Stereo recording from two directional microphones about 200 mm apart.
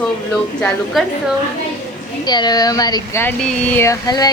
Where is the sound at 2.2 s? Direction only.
20° left (ahead or behind).